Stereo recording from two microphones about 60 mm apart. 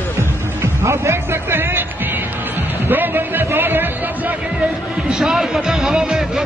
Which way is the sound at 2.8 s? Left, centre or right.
Right.